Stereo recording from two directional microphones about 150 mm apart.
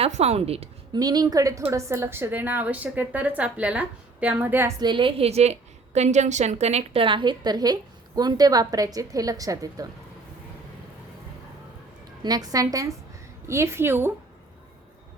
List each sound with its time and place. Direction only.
0.0 s a woman's voice: 45° right (ahead or behind)
0.9 s a woman's voice: 25° right (ahead or behind)
4.8 s a woman's voice: 30° right (ahead or behind)
12.2 s a woman's voice: 25° right (ahead or behind)